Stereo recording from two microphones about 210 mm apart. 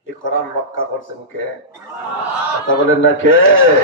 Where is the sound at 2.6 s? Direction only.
70° left (ahead or behind).